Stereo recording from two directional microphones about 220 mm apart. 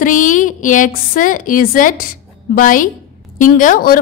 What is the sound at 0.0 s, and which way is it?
A woman's voice, 35° left (ahead or behind).